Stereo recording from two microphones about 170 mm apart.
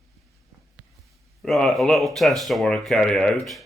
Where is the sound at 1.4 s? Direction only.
Centre (ahead or behind).